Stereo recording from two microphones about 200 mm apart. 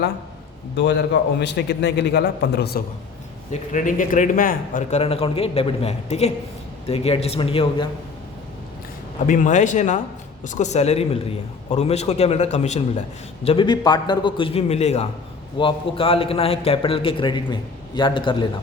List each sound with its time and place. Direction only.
0.8 s a man's voice: 60° left (ahead or behind)
3.5 s a man's voice: 40° left (ahead or behind)
9.2 s a man's voice: 40° left (ahead or behind); by 18.4 s 25° left (ahead or behind)